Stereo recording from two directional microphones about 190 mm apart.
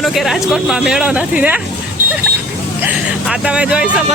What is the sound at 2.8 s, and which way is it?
Music, 5° right (ahead or behind).